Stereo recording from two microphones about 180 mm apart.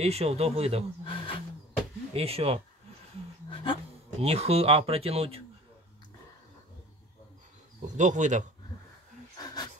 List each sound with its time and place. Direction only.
0.0 s speech: 35° right (ahead or behind)
1.0 s wild animals: 30° left (ahead or behind)
2.1 s speech: 35° right (ahead or behind)
3.4 s a sound: 30° left (ahead or behind)
4.2 s speech: 35° right (ahead or behind)
7.8 s speech: 45° right (ahead or behind)
9.4 s a sound: 20° left (ahead or behind)